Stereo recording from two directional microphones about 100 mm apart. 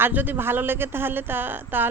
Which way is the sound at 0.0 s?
20° right (ahead or behind).